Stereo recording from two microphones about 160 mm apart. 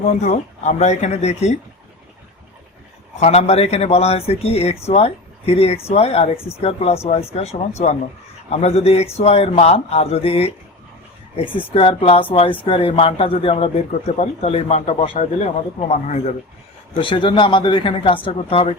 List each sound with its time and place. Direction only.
0.2 s speech: 50° left (ahead or behind)
3.2 s a man's voice: 45° left (ahead or behind)
17.0 s a man's voice: 30° left (ahead or behind)